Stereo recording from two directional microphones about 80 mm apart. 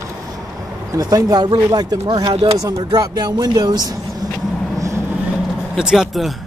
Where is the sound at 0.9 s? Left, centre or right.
Right.